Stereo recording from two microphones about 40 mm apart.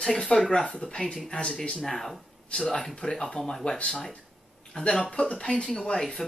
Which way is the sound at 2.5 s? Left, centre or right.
Centre.